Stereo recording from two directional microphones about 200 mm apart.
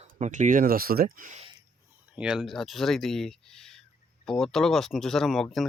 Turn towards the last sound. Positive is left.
turn(degrees=0)  # may be behind; listen again after turning